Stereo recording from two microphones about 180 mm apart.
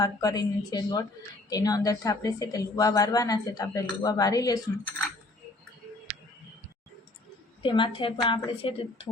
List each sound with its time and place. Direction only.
0.0 s a woman's voice: 20° left (ahead or behind)
7.6 s a woman's voice: 25° left (ahead or behind)